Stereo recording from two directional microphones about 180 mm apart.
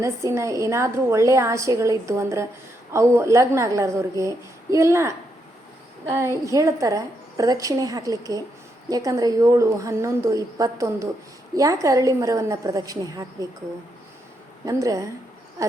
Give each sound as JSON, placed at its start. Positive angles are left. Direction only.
{"t": 0.0, "sound": "a woman's voice", "side_deg": -15}
{"t": 6.1, "sound": "a woman's voice", "side_deg": -15}
{"t": 14.6, "sound": "a woman's voice", "side_deg": -20}